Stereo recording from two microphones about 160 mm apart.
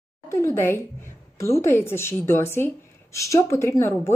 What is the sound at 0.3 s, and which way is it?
Speech, 15° left (ahead or behind).